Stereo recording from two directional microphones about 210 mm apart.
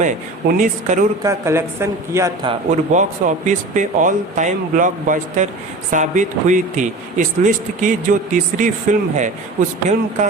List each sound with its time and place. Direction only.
0.0 s speech: 40° right (ahead or behind)
1.2 s speech: 15° right (ahead or behind)
2.5 s speech: 35° right (ahead or behind)